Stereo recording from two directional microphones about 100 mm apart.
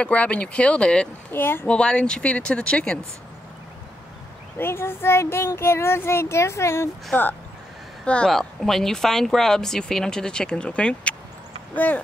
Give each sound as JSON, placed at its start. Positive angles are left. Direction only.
{"t": 0.0, "sound": "speech", "side_deg": 15}
{"t": 1.3, "sound": "speech", "side_deg": 20}
{"t": 1.7, "sound": "speech", "side_deg": 10}
{"t": 4.6, "sound": "speech", "side_deg": 25}